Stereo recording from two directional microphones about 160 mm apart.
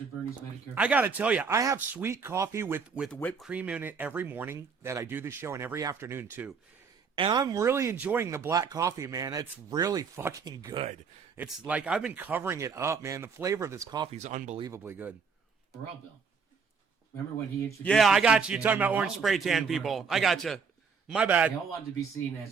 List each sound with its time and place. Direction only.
0.8 s speech: 10° right (ahead or behind)
3.1 s speech: 10° left (ahead or behind)
3.4 s speech: 10° right (ahead or behind)
7.2 s speech: 25° right (ahead or behind)
11.3 s speech: 5° right (ahead or behind); by 14.1 s 25° right (ahead or behind)
14.1 s speech: 45° right (ahead or behind)
14.6 s speech: 15° right (ahead or behind)
17.8 s a man's voice: centre (ahead or behind)